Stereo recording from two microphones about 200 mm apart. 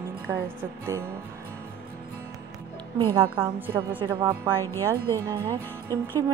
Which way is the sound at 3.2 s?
10° right (ahead or behind).